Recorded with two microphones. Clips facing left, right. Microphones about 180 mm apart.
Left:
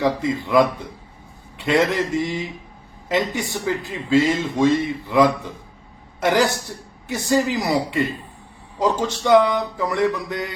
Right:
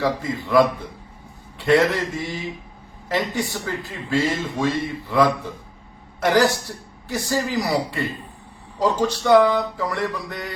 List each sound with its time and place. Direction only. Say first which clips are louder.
0.0 s speech: left 3 dB; 20° left (ahead or behind)
1.9 s speech: left 4 dB; 20° left (ahead or behind)